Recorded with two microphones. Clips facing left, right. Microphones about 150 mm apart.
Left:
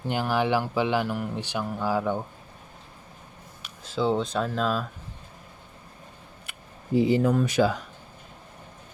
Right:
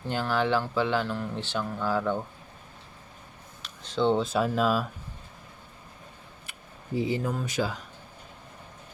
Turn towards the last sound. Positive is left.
turn(degrees=70)  # may be behind; listen again after turning